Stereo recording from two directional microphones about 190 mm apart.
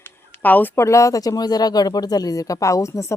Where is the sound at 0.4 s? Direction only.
10° left (ahead or behind).